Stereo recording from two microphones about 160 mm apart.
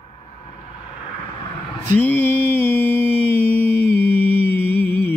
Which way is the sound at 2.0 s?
15° left (ahead or behind).